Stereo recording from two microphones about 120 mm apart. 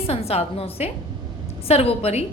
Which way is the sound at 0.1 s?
55° left (ahead or behind).